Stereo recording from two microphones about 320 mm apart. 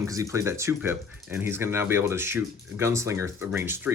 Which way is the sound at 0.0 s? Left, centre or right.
Centre.